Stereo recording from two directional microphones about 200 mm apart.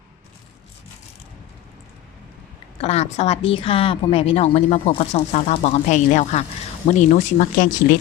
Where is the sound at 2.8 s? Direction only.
30° left (ahead or behind).